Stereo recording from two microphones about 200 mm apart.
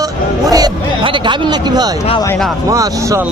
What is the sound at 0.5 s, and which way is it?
Speech, 20° right (ahead or behind).